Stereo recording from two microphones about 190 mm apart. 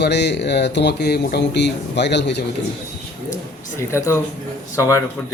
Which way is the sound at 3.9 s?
15° left (ahead or behind).